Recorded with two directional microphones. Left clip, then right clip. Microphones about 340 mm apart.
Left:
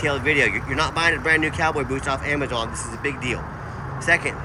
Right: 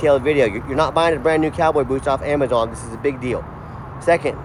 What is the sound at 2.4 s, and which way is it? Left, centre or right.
Speech, centre.